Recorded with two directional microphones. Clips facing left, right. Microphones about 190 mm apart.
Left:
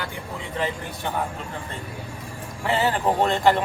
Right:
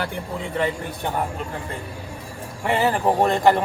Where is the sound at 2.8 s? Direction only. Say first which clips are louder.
Right 3 dB; 15° right (ahead or behind).